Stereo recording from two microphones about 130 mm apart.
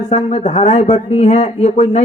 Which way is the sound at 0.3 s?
55° left (ahead or behind).